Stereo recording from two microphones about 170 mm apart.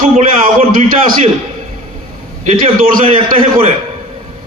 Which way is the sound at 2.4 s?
50° right (ahead or behind).